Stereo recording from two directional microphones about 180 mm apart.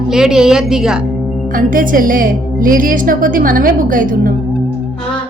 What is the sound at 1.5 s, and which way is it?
Speech, 50° right (ahead or behind).